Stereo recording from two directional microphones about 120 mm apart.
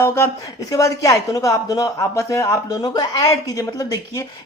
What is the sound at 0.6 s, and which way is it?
Speech, 30° left (ahead or behind).